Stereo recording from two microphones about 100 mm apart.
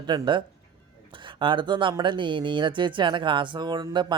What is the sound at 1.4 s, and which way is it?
Speech, 55° right (ahead or behind).